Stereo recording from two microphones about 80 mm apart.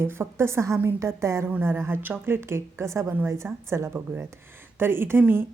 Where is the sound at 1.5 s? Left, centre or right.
Right.